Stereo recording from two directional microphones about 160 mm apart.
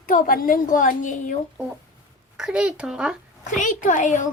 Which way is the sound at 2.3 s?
5° right (ahead or behind).